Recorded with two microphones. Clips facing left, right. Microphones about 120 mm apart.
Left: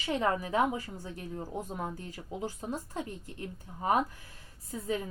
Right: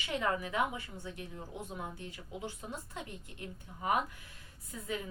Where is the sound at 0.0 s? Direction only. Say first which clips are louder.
Left 4 dB; 35° left (ahead or behind).